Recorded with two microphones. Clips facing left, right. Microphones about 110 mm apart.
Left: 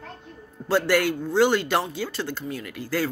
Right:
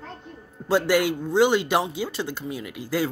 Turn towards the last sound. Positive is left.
turn(degrees=-15)  # may be behind; listen again after turning